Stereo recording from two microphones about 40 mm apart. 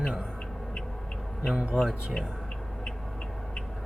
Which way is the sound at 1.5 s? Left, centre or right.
Centre.